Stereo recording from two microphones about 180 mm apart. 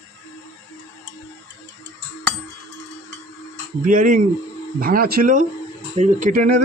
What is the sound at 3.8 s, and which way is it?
Speech, 45° right (ahead or behind).